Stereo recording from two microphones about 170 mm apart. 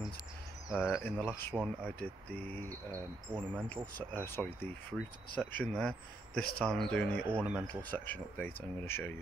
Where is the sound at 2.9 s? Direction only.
10° right (ahead or behind).